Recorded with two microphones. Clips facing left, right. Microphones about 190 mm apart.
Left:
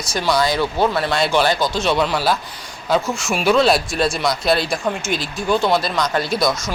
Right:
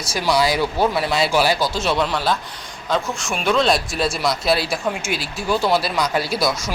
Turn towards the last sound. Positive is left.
turn(degrees=-5)  # may be behind; listen again after turning